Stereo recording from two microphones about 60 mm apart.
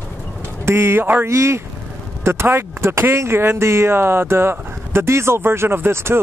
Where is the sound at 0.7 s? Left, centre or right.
Right.